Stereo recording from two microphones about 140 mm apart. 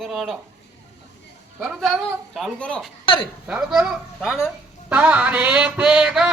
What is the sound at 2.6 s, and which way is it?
Speech, 10° left (ahead or behind).